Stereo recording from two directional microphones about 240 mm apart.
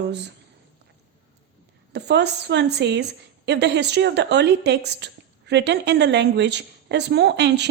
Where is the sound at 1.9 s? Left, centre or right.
Right.